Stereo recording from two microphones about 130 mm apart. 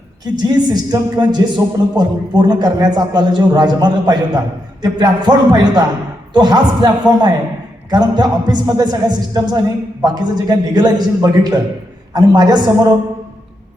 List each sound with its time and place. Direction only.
0.3 s a man's voice: 30° right (ahead or behind)